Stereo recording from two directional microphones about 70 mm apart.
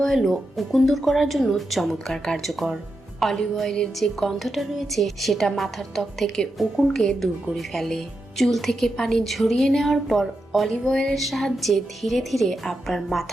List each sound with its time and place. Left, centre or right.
0.0 s a woman's voice: centre